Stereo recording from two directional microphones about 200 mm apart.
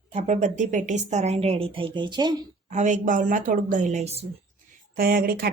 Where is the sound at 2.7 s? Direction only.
35° right (ahead or behind).